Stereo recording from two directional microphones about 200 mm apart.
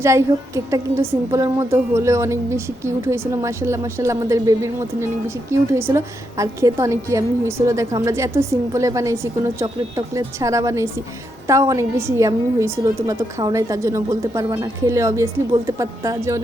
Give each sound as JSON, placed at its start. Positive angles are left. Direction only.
{"t": 0.0, "sound": "a woman's voice", "side_deg": -15}